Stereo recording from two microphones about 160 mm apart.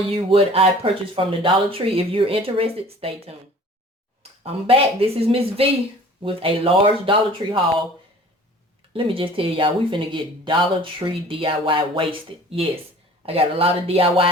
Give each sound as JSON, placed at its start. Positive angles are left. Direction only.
{"t": 0.2, "sound": "speech", "side_deg": -35}
{"t": 8.9, "sound": "speech", "side_deg": -35}